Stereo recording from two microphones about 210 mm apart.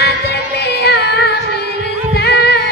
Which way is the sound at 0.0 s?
50° left (ahead or behind).